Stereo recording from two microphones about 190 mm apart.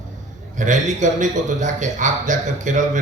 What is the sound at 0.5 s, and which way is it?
A man's voice, 40° right (ahead or behind).